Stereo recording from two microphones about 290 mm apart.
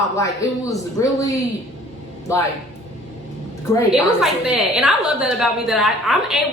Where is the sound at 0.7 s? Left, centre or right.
Centre.